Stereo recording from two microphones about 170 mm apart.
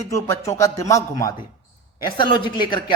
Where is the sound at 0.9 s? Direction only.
20° left (ahead or behind).